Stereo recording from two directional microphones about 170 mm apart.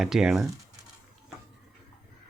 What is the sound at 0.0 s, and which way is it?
Speech, centre (ahead or behind).